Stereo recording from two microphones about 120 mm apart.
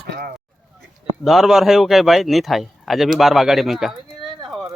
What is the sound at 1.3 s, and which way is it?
Speech, centre (ahead or behind).